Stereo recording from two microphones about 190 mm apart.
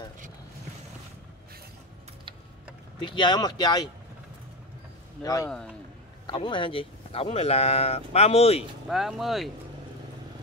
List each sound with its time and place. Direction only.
3.0 s speech: 25° left (ahead or behind)
5.2 s speech: 15° left (ahead or behind)
8.8 s speech: centre (ahead or behind)